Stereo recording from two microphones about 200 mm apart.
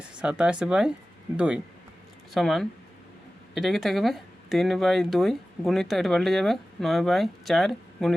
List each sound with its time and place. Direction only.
0.0 s speech: 5° right (ahead or behind)